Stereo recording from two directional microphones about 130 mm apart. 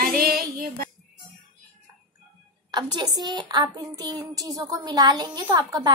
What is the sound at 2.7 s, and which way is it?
A woman's voice, 35° right (ahead or behind).